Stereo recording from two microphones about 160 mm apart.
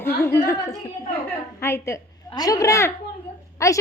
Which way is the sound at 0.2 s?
15° left (ahead or behind).